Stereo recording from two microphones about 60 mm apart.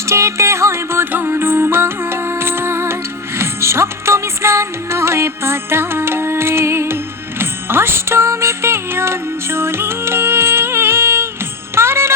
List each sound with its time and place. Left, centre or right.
0.1 s music: right
11.7 s jingle bell: right